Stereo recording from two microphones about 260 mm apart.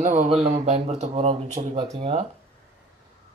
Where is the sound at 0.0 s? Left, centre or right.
Right.